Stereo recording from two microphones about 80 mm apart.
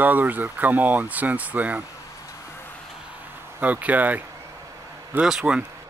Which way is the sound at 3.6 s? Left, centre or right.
Centre.